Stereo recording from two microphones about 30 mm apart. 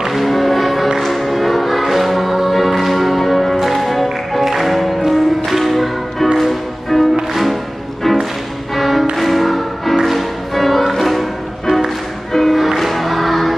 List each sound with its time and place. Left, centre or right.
0.2 s music: centre